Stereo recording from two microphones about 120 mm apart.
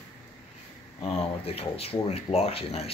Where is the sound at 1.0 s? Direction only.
55° left (ahead or behind).